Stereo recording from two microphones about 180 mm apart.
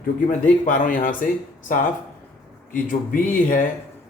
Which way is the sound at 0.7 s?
45° left (ahead or behind).